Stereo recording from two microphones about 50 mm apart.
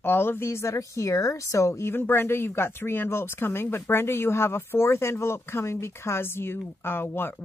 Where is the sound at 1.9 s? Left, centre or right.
Left.